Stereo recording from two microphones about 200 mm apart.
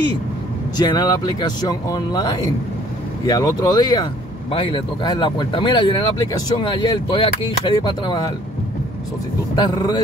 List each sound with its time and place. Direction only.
0.7 s speech: 20° left (ahead or behind)
3.3 s speech: 20° left (ahead or behind)
9.6 s speech: 20° left (ahead or behind)